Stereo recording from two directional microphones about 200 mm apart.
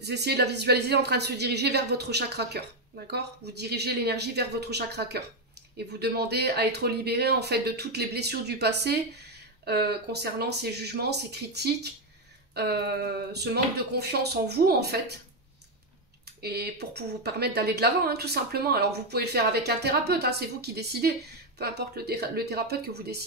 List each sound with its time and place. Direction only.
0.0 s speech: 55° right (ahead or behind)
16.3 s speech: 55° right (ahead or behind)